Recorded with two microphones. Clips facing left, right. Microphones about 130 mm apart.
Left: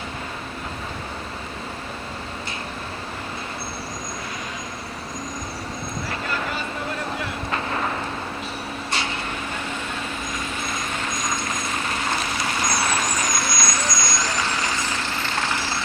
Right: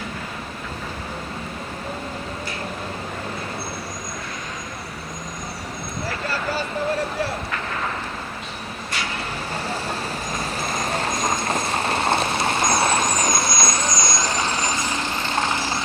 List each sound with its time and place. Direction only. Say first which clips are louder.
9.6 s vehicle: right 3 dB; 35° right (ahead or behind); by 15.8 s 20° right (ahead or behind)